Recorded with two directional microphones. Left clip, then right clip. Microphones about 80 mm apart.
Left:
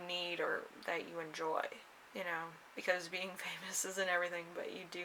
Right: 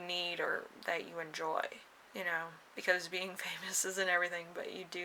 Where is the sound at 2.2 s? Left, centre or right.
Right.